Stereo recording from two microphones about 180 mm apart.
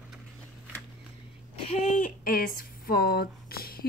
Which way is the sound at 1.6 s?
35° left (ahead or behind).